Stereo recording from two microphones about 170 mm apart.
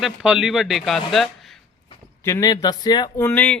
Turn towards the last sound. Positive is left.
turn(degrees=10)  # may be behind; listen again after turning